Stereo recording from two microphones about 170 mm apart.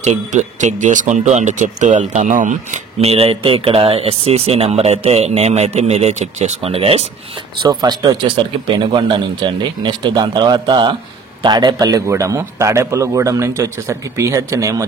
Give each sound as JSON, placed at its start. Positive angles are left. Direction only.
{"t": 0.0, "sound": "speech", "side_deg": -40}
{"t": 7.6, "sound": "a man's voice", "side_deg": -25}